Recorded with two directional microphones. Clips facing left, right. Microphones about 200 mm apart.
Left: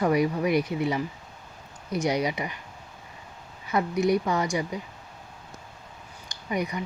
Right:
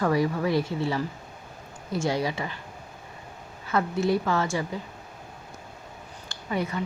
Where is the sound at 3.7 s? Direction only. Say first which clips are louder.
Left 1 dB; 15° left (ahead or behind).